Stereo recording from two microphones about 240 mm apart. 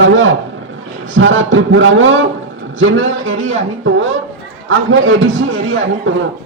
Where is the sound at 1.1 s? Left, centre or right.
Right.